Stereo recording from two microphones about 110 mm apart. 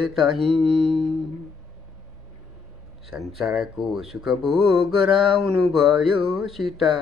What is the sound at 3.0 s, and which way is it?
Speech, centre (ahead or behind).